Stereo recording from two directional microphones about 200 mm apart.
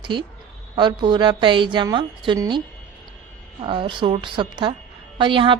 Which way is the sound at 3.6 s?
25° right (ahead or behind).